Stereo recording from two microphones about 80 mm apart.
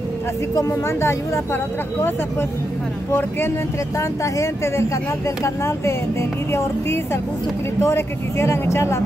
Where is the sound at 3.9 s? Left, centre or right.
Left.